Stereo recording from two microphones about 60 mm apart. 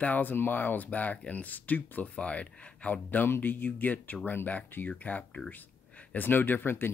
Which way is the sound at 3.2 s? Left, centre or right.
Left.